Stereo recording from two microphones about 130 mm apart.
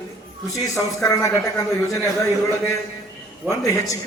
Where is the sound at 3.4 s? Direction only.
25° left (ahead or behind).